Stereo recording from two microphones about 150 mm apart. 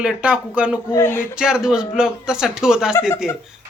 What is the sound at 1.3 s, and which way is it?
Speech, 5° right (ahead or behind).